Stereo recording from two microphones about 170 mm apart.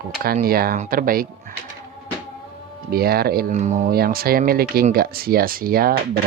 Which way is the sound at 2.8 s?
65° right (ahead or behind).